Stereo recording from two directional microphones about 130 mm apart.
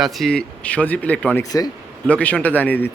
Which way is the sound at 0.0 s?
Centre (ahead or behind).